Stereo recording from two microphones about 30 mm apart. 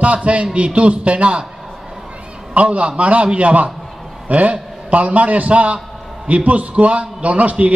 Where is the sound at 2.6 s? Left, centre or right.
Right.